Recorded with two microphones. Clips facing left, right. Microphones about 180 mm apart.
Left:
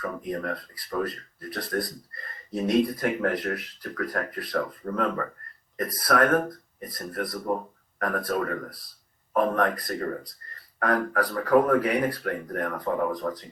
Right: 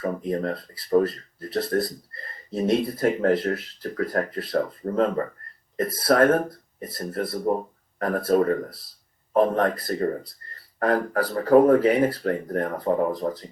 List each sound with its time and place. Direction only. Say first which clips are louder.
0.0 s speech: right 5 dB; 30° right (ahead or behind)